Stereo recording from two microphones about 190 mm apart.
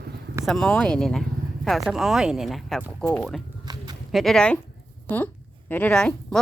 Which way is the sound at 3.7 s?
20° right (ahead or behind).